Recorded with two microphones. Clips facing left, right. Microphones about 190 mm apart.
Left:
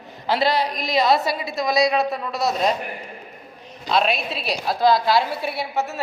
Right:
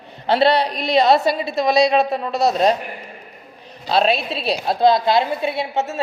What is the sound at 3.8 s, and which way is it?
A woman's voice, 30° right (ahead or behind).